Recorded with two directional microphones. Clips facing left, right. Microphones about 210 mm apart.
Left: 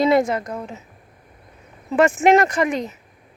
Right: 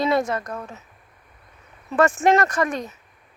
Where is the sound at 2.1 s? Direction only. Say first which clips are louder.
Left 3 dB; 10° left (ahead or behind).